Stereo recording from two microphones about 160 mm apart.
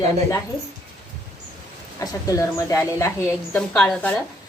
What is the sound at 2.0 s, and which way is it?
A woman's voice, 20° left (ahead or behind).